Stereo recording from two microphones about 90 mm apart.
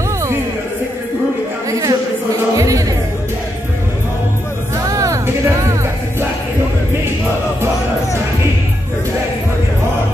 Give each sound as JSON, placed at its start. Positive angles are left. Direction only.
{"t": 1.7, "sound": "a sound", "side_deg": -40}
{"t": 2.5, "sound": "music", "side_deg": -40}
{"t": 4.7, "sound": "music", "side_deg": -35}